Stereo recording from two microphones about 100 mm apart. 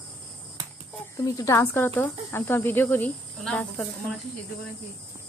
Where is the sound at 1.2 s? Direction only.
30° left (ahead or behind); by 3.9 s 10° left (ahead or behind).